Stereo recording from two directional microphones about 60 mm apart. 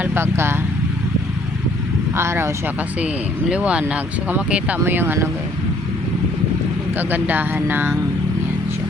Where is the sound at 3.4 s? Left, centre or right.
Centre.